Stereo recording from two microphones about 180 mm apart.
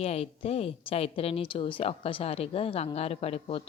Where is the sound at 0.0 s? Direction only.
35° left (ahead or behind).